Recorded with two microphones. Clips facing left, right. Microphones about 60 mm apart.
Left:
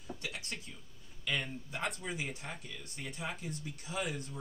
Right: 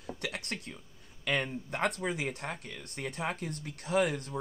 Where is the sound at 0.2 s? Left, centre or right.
Right.